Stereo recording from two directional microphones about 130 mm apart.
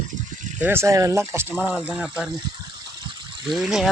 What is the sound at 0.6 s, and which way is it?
Speech, 15° right (ahead or behind).